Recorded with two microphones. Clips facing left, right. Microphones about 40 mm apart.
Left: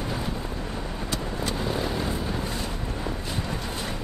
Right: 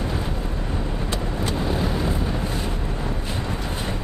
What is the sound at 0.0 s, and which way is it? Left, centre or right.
Vehicle, centre.